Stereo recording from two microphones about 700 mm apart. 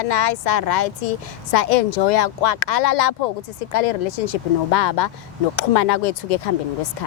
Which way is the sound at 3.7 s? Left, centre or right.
Left.